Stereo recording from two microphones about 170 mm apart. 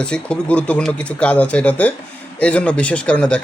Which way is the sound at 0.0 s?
5° left (ahead or behind).